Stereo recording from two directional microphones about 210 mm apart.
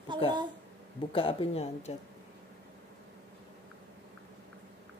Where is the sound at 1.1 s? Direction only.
25° left (ahead or behind).